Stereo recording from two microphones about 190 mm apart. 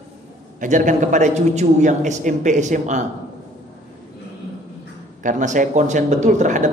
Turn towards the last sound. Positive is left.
turn(degrees=-40)  # may be behind; listen again after turning